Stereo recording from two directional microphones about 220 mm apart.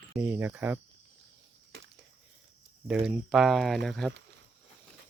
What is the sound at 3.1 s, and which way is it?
Speech, centre (ahead or behind).